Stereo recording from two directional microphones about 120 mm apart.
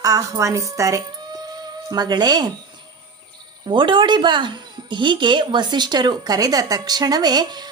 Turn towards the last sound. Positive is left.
turn(degrees=-35)  # may be behind; listen again after turning